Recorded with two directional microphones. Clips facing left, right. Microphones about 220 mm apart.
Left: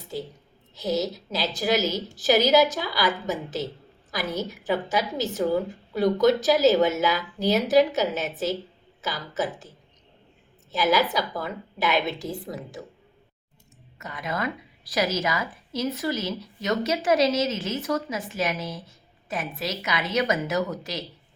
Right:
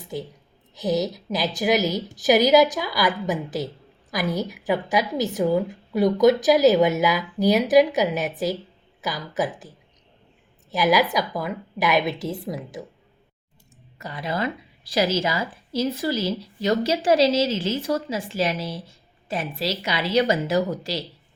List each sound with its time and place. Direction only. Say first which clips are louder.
0.8 s a woman's voice: right 3 dB; 15° right (ahead or behind)
10.7 s a woman's voice: right 2 dB; 15° right (ahead or behind)
14.0 s a woman's voice: right 3 dB; 30° right (ahead or behind)